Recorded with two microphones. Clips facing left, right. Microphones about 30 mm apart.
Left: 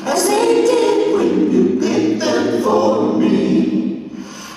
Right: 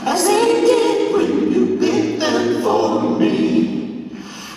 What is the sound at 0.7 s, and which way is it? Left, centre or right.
Choir, centre.